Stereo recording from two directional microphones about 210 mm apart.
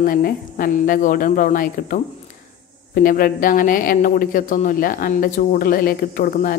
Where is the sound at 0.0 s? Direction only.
40° left (ahead or behind).